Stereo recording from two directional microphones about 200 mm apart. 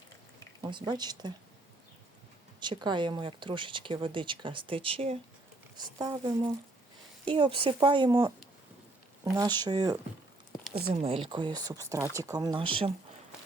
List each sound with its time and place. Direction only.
0.6 s speech: 20° right (ahead or behind)
2.6 s speech: 20° right (ahead or behind)